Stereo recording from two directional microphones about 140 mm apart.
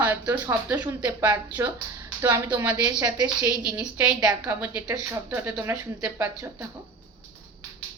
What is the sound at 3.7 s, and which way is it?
Speech, 10° right (ahead or behind).